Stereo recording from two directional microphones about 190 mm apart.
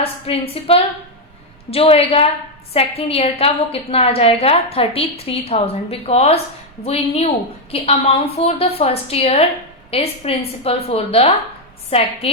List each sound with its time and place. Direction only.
0.0 s a woman's voice: 30° left (ahead or behind)